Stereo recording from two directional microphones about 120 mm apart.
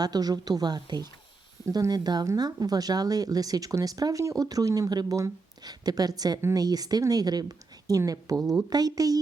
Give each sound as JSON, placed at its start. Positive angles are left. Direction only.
{"t": 0.0, "sound": "speech", "side_deg": -35}